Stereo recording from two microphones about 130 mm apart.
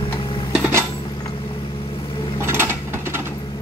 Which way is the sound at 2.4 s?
20° right (ahead or behind).